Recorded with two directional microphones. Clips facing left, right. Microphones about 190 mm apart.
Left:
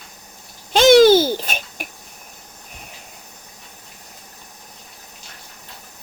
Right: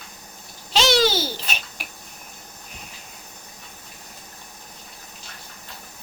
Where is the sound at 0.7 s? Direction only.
50° left (ahead or behind).